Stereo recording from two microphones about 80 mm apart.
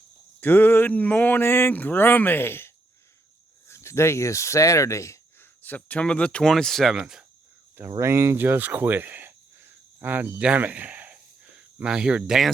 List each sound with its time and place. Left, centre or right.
0.3 s speech: left
5.6 s speech: left
6.5 s speech: centre
7.0 s speech: centre
7.8 s speech: right
10.4 s a sound: centre